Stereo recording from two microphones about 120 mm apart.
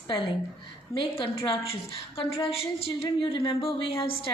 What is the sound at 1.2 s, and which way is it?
A woman's voice, 50° left (ahead or behind).